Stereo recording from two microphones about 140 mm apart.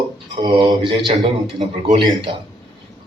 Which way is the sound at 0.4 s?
30° right (ahead or behind).